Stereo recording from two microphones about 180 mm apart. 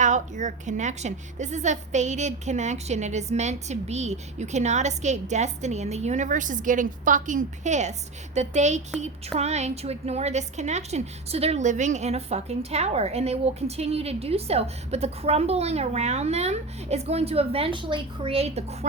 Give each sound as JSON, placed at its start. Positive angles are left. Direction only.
{"t": 0.0, "sound": "a woman's voice", "side_deg": -45}